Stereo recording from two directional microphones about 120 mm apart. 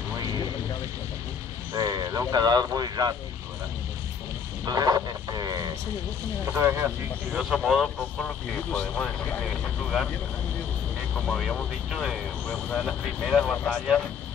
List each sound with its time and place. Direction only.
1.7 s speech: 30° right (ahead or behind)
4.6 s speech: 30° right (ahead or behind)
6.4 s speech: 20° right (ahead or behind)
7.3 s speech: 5° right (ahead or behind)
8.7 s speech: 10° left (ahead or behind)
11.1 s speech: 5° left (ahead or behind)